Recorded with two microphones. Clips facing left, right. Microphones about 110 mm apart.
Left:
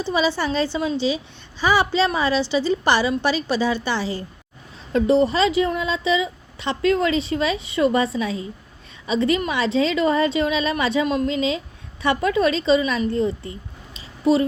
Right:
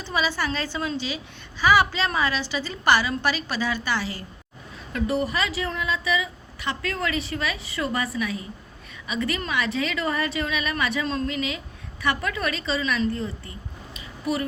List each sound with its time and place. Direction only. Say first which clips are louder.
0.0 s a woman's voice: left 5 dB; 20° left (ahead or behind)